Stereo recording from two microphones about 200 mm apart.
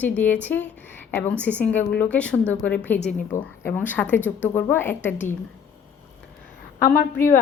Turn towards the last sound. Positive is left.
turn(degrees=45)  # may be behind; listen again after turning